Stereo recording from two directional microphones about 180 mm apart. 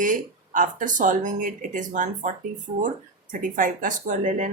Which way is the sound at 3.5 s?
45° right (ahead or behind).